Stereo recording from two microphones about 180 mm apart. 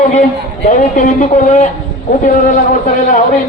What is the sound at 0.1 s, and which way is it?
A woman's voice, 45° left (ahead or behind).